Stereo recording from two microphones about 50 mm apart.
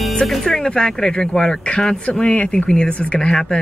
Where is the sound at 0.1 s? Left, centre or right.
Centre.